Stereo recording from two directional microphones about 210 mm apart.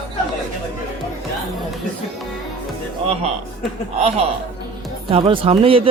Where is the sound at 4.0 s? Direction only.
30° right (ahead or behind).